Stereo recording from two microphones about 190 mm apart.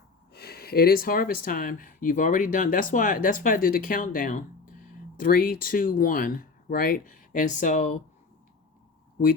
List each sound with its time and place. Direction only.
0.3 s speech: 55° left (ahead or behind)